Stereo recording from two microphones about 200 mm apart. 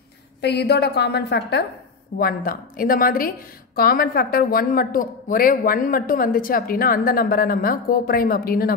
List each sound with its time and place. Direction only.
0.4 s a woman's voice: 55° left (ahead or behind)